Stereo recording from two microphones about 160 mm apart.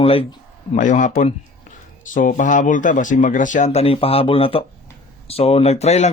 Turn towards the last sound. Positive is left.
turn(degrees=40)  # may be behind; listen again after turning